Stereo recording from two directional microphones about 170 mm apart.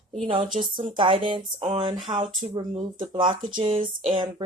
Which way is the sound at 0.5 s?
25° right (ahead or behind).